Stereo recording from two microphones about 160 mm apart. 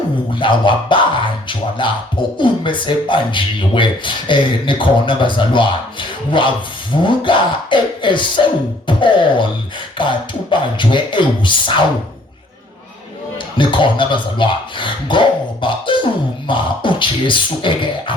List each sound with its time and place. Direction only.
0.3 s speech: 30° left (ahead or behind)
13.6 s speech: 30° left (ahead or behind)